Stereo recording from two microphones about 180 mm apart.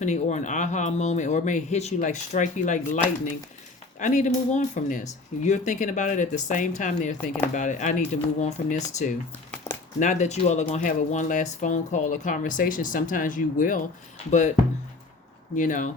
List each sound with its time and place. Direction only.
0.0 s speech: 40° left (ahead or behind)
4.0 s speech: 45° left (ahead or behind)
15.5 s speech: 45° left (ahead or behind)